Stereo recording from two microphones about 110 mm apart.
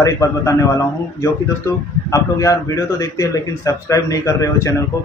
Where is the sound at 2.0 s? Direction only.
30° left (ahead or behind).